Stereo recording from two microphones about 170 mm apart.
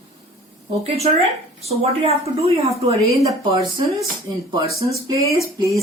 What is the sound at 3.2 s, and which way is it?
Speech, 25° right (ahead or behind).